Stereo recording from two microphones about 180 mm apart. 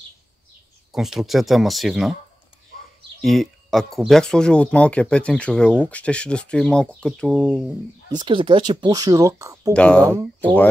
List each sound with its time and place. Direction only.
0.9 s speech: centre (ahead or behind)
3.2 s speech: centre (ahead or behind)
8.2 s speech: 25° right (ahead or behind)
9.8 s speech: 5° left (ahead or behind)